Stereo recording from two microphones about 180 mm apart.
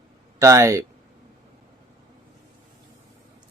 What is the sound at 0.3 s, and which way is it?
Speech, 15° right (ahead or behind).